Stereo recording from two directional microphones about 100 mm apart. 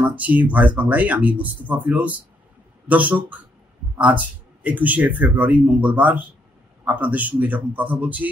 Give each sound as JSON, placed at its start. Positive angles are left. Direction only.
{"t": 0.1, "sound": "a man's voice", "side_deg": -15}